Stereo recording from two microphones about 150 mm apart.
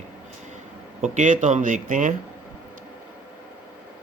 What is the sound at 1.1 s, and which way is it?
Speech, 55° right (ahead or behind).